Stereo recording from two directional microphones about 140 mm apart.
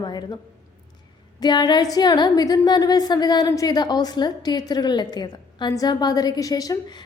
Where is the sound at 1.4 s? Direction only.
30° left (ahead or behind).